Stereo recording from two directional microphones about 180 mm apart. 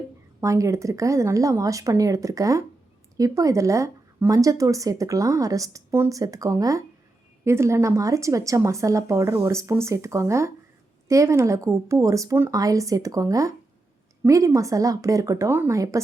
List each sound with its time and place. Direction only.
0.4 s a woman's voice: 15° right (ahead or behind)